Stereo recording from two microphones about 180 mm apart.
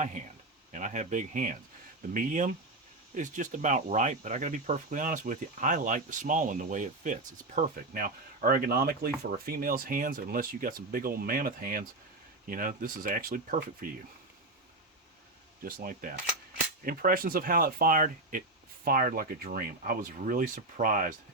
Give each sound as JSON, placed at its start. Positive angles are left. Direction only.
{"t": 0.7, "sound": "speech", "side_deg": -40}
{"t": 15.6, "sound": "speech", "side_deg": -50}